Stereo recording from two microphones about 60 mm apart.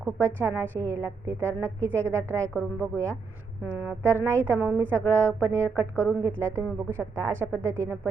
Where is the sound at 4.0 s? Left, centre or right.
Right.